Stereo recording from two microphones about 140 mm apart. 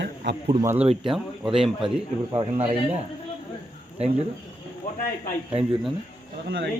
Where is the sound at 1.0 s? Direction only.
5° right (ahead or behind).